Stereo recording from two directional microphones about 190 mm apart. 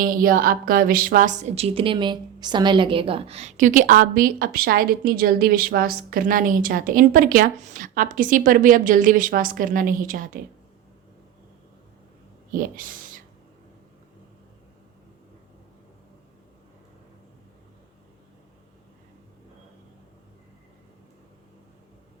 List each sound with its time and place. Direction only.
0.0 s a woman's voice: 50° right (ahead or behind)
12.5 s speech: 45° right (ahead or behind)